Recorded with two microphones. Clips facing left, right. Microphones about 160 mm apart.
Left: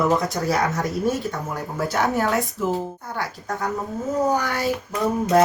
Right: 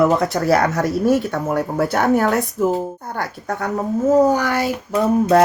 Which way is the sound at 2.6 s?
45° right (ahead or behind).